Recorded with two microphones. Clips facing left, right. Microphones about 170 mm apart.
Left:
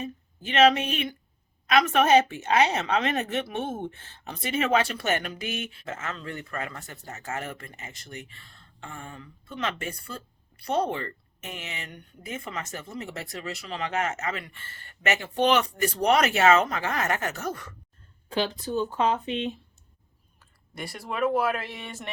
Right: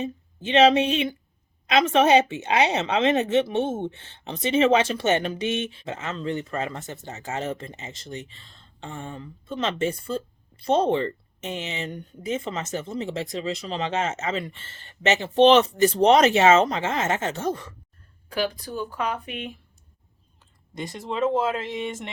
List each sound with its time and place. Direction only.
0.0 s speech: 20° right (ahead or behind)
18.3 s speech: 25° left (ahead or behind)
20.7 s speech: 20° right (ahead or behind)